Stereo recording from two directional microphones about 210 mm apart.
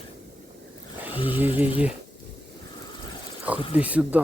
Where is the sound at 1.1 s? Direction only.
25° left (ahead or behind).